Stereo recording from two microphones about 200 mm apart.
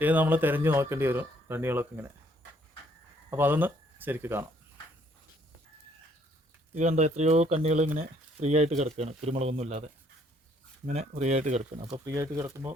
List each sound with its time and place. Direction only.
0.0 s speech: 10° right (ahead or behind)
3.2 s speech: 10° right (ahead or behind)
6.7 s speech: 35° right (ahead or behind)
10.8 s speech: 35° right (ahead or behind)
11.9 s speech: 15° right (ahead or behind)